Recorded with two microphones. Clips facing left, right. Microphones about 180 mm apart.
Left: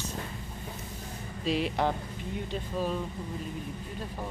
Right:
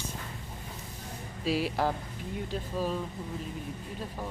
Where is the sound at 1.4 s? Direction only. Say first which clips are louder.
Even; 5° right (ahead or behind).